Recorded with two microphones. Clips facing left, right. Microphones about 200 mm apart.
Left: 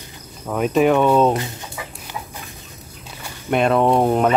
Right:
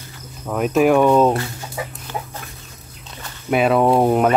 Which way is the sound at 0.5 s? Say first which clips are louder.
Right 1 dB; centre (ahead or behind).